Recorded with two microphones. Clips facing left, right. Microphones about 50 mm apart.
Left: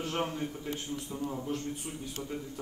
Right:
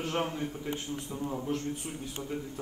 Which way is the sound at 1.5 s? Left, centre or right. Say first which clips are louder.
Right 2 dB; right.